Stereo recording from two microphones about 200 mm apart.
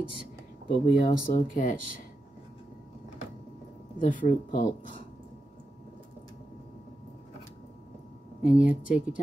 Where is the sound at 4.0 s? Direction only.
40° left (ahead or behind).